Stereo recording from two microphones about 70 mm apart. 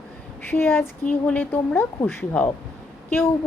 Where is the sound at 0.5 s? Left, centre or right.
Left.